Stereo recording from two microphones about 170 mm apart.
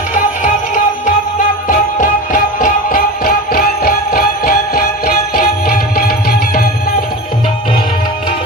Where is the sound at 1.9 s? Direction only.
50° left (ahead or behind).